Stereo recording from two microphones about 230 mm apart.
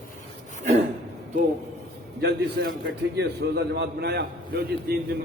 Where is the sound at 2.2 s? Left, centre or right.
Right.